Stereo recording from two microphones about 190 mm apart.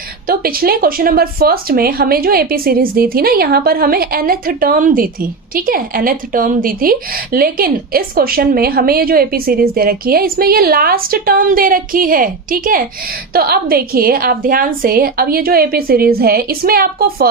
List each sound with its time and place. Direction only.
0.3 s speech: 50° right (ahead or behind)